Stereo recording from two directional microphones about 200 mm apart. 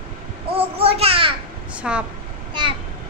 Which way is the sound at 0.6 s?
30° right (ahead or behind).